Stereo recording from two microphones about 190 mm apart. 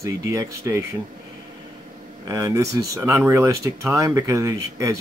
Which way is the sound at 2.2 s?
15° right (ahead or behind).